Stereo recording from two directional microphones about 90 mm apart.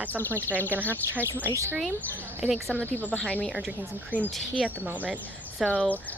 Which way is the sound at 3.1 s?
15° left (ahead or behind).